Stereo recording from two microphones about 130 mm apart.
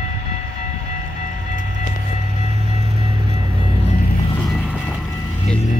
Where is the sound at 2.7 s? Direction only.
50° right (ahead or behind).